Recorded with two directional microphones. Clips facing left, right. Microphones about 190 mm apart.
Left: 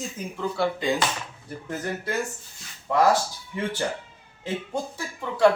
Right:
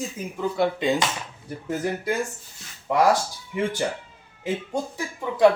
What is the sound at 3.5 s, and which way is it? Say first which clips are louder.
Speech: right 3 dB; 15° right (ahead or behind).